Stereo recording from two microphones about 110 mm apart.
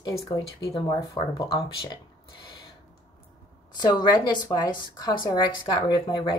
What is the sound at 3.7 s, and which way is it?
A woman's voice, 40° left (ahead or behind).